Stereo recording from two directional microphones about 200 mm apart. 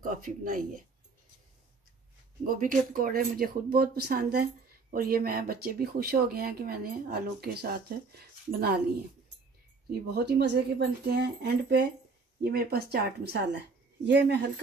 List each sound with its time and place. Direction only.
0.0 s speech: 40° right (ahead or behind)
2.4 s speech: 45° right (ahead or behind)
9.8 s speech: 50° right (ahead or behind)
12.4 s speech: 50° right (ahead or behind)